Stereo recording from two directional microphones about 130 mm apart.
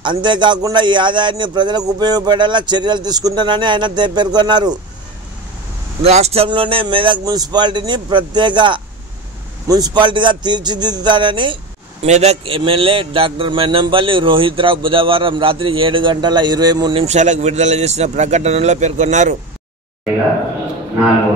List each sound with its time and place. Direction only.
0.0 s a man's voice: 35° right (ahead or behind)
6.0 s speech: 55° right (ahead or behind)
7.2 s a man's voice: 30° right (ahead or behind)
12.1 s a man's voice: 55° right (ahead or behind); by 17.0 s 35° right (ahead or behind)
17.0 s speech: 60° right (ahead or behind)